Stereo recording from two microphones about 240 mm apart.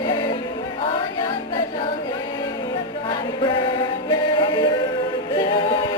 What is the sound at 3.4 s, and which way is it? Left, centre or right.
Music, centre.